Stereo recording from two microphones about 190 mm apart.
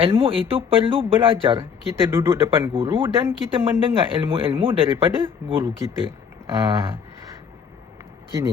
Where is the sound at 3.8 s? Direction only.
30° right (ahead or behind).